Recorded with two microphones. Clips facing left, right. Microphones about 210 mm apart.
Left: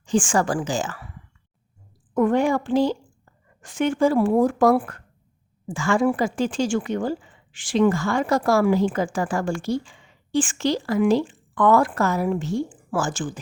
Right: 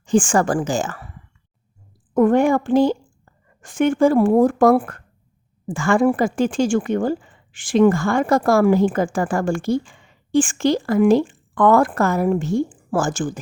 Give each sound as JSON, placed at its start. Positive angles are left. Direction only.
{"t": 0.0, "sound": "speech", "side_deg": -50}
{"t": 2.1, "sound": "speech", "side_deg": -50}